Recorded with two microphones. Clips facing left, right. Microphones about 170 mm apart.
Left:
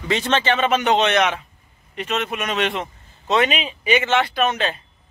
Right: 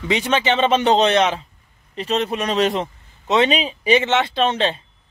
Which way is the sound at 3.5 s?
35° right (ahead or behind).